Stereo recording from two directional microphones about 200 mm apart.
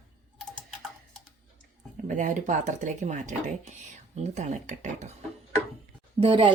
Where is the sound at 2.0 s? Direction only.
40° right (ahead or behind).